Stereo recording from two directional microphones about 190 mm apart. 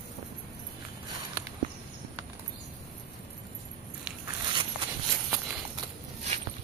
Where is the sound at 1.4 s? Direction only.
10° right (ahead or behind).